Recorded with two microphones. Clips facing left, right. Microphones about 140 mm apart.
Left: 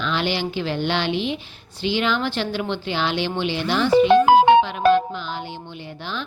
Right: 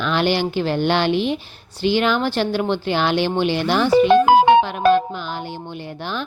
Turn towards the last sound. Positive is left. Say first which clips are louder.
# right 1 dB
turn(degrees=-50)  # may be behind; listen again after turning